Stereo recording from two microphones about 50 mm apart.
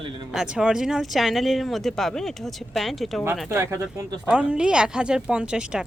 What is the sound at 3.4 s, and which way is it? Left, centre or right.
Speech, right.